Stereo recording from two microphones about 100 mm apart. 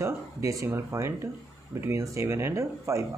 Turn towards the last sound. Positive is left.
turn(degrees=-30)  # may be behind; listen again after turning